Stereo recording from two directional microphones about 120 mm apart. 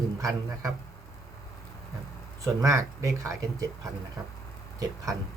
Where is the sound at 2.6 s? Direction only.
25° right (ahead or behind).